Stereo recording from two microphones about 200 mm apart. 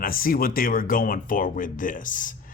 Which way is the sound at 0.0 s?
45° left (ahead or behind).